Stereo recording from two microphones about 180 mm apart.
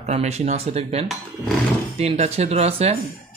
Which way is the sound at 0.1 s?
40° right (ahead or behind).